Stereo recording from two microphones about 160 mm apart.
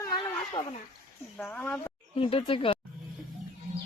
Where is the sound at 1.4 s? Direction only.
5° left (ahead or behind).